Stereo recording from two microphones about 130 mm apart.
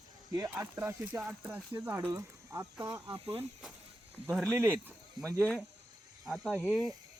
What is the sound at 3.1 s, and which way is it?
Speech, 45° right (ahead or behind).